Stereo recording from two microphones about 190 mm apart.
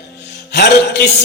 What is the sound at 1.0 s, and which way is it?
Speech, 60° left (ahead or behind).